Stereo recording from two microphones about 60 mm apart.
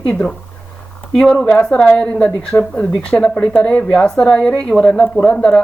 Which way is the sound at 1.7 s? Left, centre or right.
Centre.